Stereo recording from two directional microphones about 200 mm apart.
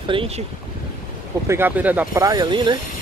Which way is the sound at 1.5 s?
10° right (ahead or behind).